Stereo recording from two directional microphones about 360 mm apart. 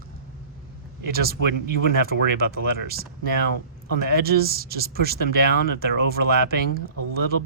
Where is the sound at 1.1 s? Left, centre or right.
Right.